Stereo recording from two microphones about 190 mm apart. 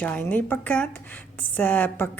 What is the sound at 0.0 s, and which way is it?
Speech, 10° left (ahead or behind).